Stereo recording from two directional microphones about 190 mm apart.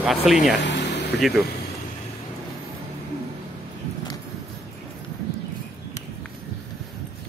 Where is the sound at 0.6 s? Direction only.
65° left (ahead or behind).